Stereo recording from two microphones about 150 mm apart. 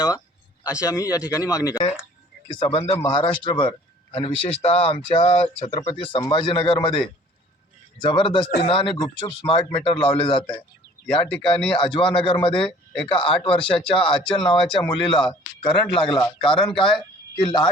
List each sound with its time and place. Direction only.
0.6 s speech: 20° left (ahead or behind)
2.6 s speech: 35° left (ahead or behind)
6.1 s speech: 30° left (ahead or behind)
8.0 s speech: 35° left (ahead or behind)
11.8 s speech: 35° left (ahead or behind)